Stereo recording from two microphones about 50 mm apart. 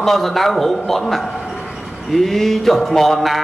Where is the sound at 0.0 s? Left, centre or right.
Centre.